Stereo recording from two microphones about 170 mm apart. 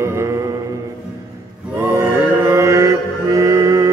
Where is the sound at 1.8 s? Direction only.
15° right (ahead or behind).